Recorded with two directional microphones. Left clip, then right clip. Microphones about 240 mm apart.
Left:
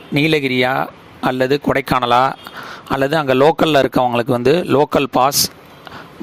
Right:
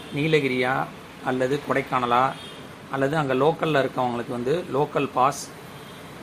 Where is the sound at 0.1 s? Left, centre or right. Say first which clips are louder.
Left 7 dB; left.